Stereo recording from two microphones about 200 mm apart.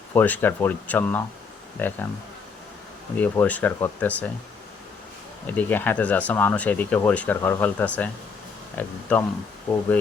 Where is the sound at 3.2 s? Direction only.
10° left (ahead or behind).